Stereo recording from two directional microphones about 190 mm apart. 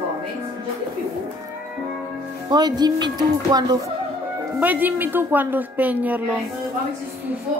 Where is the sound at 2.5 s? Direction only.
20° right (ahead or behind).